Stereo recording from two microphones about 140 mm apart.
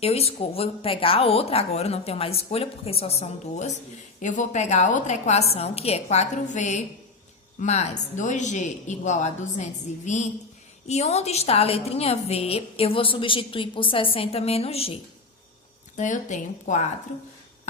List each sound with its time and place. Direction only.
0.0 s speech: 45° left (ahead or behind)
16.0 s speech: 60° left (ahead or behind)